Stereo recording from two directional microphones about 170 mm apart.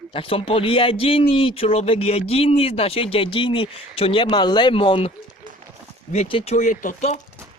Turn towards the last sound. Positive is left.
turn(degrees=45)  # may be behind; listen again after turning